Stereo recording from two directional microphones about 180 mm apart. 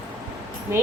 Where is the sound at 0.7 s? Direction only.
15° right (ahead or behind).